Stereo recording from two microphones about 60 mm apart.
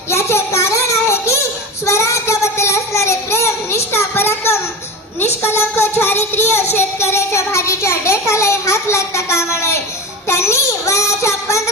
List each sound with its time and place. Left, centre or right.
0.1 s a sound: left
1.8 s child singing: left
5.2 s speech: left
10.2 s child singing: left